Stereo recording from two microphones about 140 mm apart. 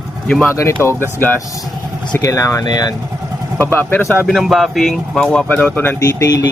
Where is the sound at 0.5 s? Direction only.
20° left (ahead or behind).